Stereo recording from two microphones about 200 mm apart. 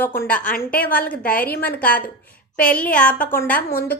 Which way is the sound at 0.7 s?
45° left (ahead or behind).